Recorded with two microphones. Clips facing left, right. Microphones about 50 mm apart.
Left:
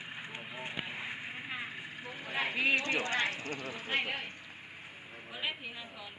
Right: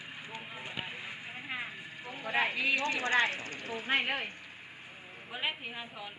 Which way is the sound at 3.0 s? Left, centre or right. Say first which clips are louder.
Right 4 dB; right.